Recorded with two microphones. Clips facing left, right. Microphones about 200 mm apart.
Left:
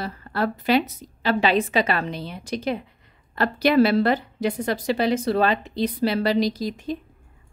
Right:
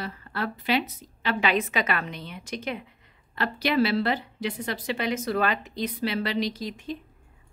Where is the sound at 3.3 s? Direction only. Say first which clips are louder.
Left 6 dB; 45° left (ahead or behind).